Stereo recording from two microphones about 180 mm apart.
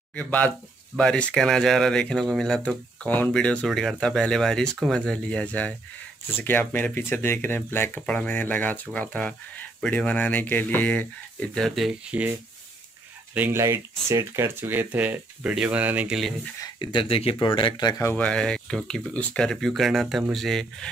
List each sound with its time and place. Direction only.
0.1 s speech: 10° left (ahead or behind)
16.6 s speech: 25° left (ahead or behind)
18.1 s speech: 5° left (ahead or behind)